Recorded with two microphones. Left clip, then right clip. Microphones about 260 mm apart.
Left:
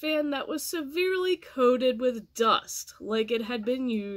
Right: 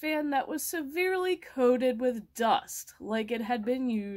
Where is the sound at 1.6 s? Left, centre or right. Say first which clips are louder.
Left 2 dB; right.